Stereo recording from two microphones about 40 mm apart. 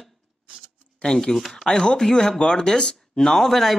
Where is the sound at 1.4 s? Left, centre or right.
Centre.